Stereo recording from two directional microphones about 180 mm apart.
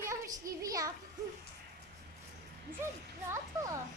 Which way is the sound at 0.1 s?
20° right (ahead or behind).